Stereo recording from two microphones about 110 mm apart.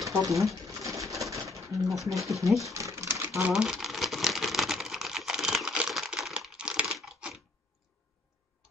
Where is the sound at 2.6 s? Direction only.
30° right (ahead or behind).